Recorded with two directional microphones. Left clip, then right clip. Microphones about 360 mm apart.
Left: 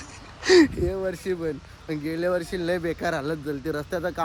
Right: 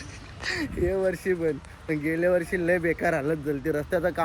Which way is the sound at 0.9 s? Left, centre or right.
Centre.